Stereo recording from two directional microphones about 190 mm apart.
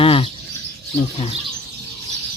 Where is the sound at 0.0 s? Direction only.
30° left (ahead or behind).